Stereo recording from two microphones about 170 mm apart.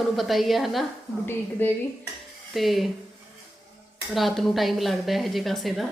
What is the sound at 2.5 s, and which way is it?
Speech, centre (ahead or behind).